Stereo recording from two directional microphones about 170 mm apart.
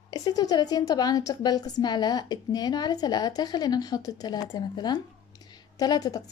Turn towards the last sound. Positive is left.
turn(degrees=20)  # may be behind; listen again after turning